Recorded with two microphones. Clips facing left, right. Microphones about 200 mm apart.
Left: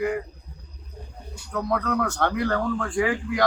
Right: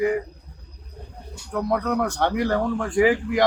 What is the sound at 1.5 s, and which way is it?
Speech, 15° right (ahead or behind).